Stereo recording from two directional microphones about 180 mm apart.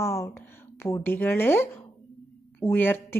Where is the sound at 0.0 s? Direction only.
15° left (ahead or behind).